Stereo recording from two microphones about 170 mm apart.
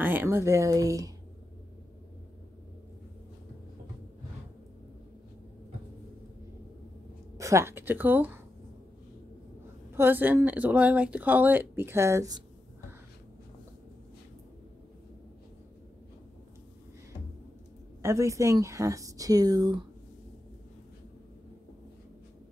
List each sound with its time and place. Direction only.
0.0 s a woman's voice: 10° right (ahead or behind)
7.3 s a woman's voice: 20° right (ahead or behind)
9.9 s a woman's voice: 10° right (ahead or behind)
18.0 s speech: 15° right (ahead or behind)